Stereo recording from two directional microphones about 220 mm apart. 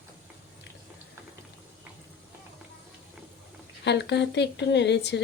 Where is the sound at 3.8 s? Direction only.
50° left (ahead or behind).